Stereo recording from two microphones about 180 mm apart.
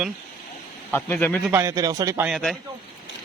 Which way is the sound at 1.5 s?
15° right (ahead or behind).